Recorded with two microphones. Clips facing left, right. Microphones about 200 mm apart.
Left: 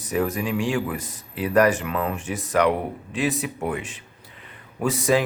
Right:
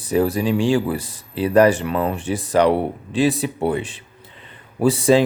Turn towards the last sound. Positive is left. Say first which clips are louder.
# right 6 dB
turn(degrees=-30)  # may be behind; listen again after turning